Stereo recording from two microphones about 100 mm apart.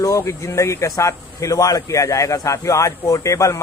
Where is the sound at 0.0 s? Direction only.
30° left (ahead or behind).